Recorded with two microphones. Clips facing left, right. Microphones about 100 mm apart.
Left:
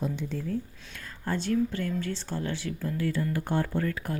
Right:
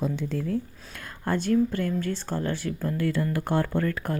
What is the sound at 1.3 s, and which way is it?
Speech, 50° right (ahead or behind).